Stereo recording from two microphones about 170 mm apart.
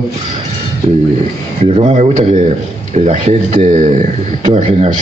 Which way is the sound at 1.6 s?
40° right (ahead or behind).